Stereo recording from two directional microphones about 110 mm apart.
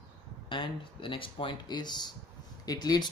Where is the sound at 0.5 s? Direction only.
50° left (ahead or behind).